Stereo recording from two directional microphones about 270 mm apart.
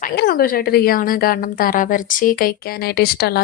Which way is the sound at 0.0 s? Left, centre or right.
Left.